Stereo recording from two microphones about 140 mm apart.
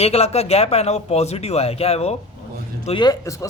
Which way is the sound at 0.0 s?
50° left (ahead or behind).